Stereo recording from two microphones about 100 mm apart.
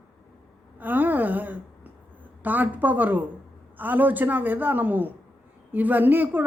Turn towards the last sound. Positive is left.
turn(degrees=-20)  # may be behind; listen again after turning